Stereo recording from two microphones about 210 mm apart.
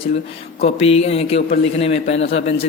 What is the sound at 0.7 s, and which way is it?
Speech, 30° left (ahead or behind).